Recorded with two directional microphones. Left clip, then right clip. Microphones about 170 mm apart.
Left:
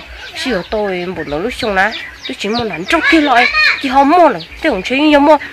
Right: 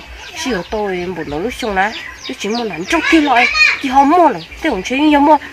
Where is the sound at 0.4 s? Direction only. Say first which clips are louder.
Left 2 dB; 20° left (ahead or behind).